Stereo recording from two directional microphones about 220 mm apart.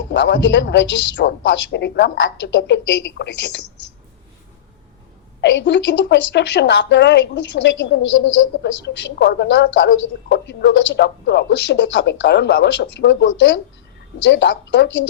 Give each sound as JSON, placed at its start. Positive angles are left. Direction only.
{"t": 0.0, "sound": "a woman's voice", "side_deg": 55}
{"t": 5.4, "sound": "a woman's voice", "side_deg": 55}